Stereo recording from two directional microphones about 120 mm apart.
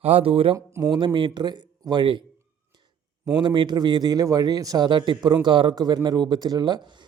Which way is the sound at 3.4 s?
40° right (ahead or behind).